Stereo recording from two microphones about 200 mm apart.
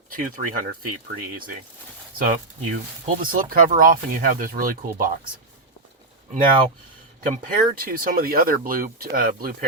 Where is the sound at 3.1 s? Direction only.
45° right (ahead or behind).